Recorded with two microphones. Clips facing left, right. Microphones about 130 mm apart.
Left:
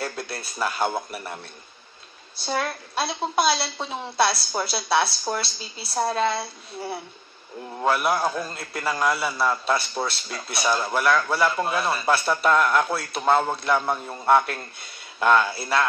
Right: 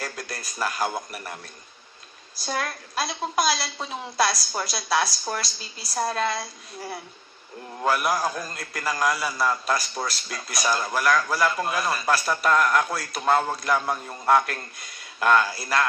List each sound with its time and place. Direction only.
0.0 s a man's voice: 30° left (ahead or behind)